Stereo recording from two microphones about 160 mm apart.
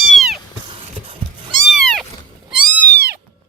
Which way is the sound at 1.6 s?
Centre (ahead or behind).